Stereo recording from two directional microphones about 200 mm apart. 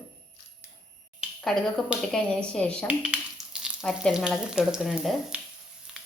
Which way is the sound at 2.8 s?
5° right (ahead or behind).